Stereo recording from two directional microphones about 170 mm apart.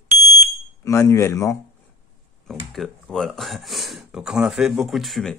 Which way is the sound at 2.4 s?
Centre (ahead or behind).